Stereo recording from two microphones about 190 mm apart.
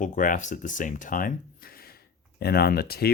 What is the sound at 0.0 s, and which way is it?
Speech, 45° left (ahead or behind).